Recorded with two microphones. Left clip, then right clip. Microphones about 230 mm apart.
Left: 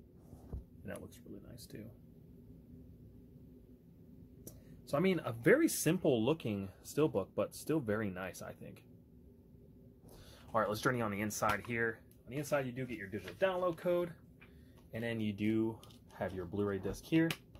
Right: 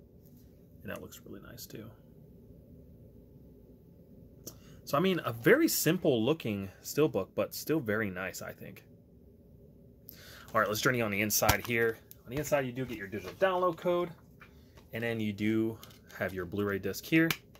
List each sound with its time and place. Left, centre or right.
0.8 s speech: centre
4.5 s speech: centre
10.2 s speech: centre
13.6 s speech: centre